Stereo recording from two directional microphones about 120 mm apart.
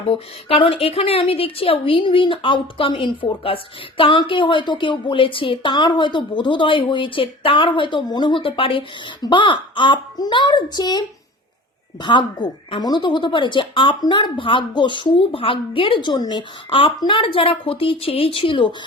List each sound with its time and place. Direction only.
0.1 s a woman's voice: 50° left (ahead or behind)
12.0 s a woman's voice: 40° left (ahead or behind)
16.6 s a woman's voice: 50° left (ahead or behind)